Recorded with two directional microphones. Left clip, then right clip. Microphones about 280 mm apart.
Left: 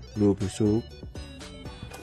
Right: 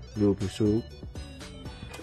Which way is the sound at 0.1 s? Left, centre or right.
Centre.